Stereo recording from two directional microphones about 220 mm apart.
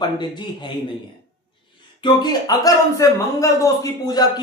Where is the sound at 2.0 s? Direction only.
20° left (ahead or behind).